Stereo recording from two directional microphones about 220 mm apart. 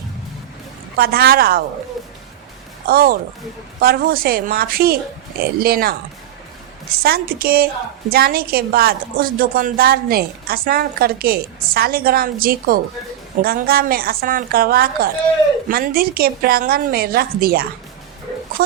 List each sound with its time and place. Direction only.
0.9 s a woman's voice: 45° right (ahead or behind)
2.8 s a woman's voice: 45° right (ahead or behind)